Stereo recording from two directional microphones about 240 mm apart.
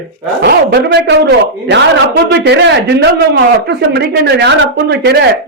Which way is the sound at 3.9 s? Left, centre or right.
Right.